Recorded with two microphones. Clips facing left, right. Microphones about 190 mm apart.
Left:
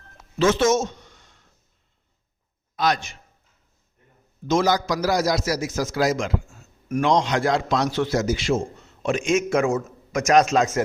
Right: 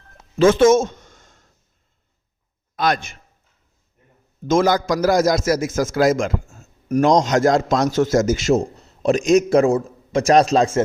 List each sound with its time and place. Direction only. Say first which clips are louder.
0.3 s a sound: right 6 dB; 50° right (ahead or behind)
2.7 s a man's voice: right 2 dB; 55° right (ahead or behind)
4.4 s a man's voice: right 4 dB; 50° right (ahead or behind); by 10.8 s 35° right (ahead or behind)